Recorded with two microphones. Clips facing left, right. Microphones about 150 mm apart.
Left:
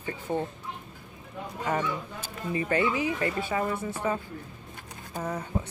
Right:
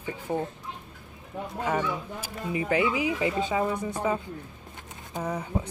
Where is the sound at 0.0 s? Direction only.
5° right (ahead or behind).